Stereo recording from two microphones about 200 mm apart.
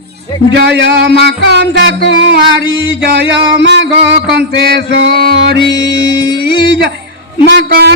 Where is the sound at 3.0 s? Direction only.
55° right (ahead or behind).